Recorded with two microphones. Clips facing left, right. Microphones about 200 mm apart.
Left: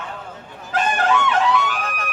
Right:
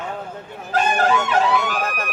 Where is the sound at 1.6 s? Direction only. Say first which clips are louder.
Right 2 dB; 45° right (ahead or behind).